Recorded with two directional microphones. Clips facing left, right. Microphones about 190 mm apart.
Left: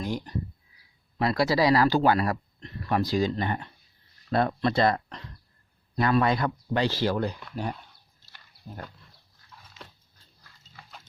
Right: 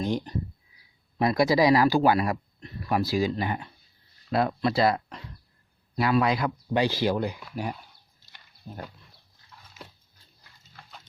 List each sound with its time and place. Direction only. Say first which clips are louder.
0.0 s speech: right 3 dB; 20° right (ahead or behind)
8.3 s dog: right 1 dB; 10° right (ahead or behind)